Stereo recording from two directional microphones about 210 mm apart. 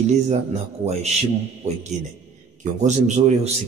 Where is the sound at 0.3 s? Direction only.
30° right (ahead or behind).